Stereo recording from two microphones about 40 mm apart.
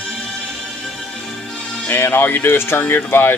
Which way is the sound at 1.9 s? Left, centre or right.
Left.